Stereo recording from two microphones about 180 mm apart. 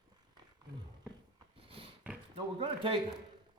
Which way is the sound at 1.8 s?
30° right (ahead or behind).